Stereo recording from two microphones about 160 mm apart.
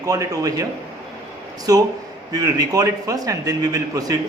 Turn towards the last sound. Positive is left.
turn(degrees=-20)  # may be behind; listen again after turning